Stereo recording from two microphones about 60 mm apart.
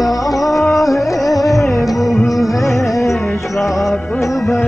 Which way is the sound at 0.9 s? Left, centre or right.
Left.